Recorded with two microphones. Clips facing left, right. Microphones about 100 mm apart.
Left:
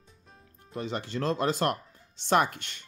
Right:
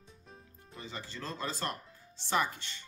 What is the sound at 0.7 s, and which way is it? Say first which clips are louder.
Speech: left 11 dB; 80° left.